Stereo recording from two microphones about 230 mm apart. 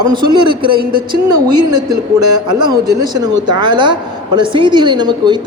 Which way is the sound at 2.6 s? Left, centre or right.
Centre.